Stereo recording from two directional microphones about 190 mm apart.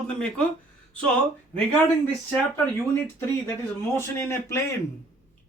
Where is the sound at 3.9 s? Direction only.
15° left (ahead or behind).